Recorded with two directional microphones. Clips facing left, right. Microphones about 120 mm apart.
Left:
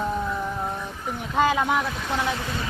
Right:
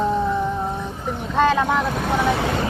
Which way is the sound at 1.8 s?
55° right (ahead or behind).